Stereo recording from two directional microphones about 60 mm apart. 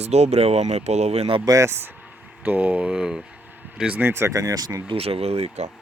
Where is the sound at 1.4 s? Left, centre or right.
Right.